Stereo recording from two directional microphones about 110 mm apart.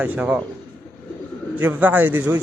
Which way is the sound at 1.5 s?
15° right (ahead or behind).